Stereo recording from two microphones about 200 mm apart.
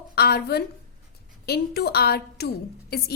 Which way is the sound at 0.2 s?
50° left (ahead or behind).